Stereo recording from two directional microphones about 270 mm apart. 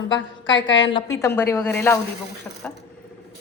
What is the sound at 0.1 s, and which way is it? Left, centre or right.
Speech, left.